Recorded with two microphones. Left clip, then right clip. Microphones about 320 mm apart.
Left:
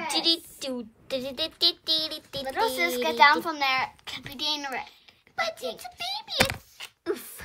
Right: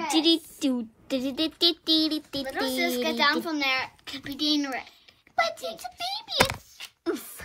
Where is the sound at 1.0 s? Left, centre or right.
Centre.